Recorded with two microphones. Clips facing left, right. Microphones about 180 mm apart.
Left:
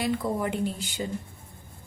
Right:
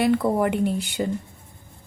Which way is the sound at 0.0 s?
65° right (ahead or behind).